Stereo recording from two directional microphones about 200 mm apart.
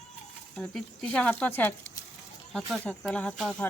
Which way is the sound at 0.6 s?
Centre (ahead or behind).